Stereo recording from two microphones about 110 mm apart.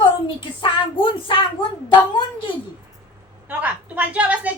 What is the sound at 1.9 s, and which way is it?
Speech, 50° left (ahead or behind).